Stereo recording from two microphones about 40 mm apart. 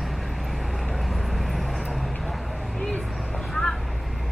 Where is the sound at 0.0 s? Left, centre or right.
Centre.